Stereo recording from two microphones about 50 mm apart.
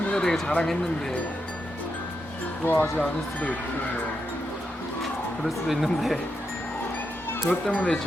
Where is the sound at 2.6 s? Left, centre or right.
Left.